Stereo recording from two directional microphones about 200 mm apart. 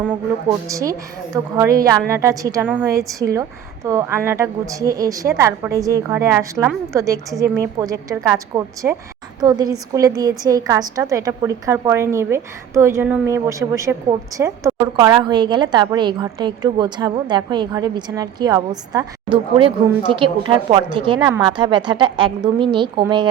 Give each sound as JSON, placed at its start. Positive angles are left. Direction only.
{"t": 0.4, "sound": "a woman's voice", "side_deg": -15}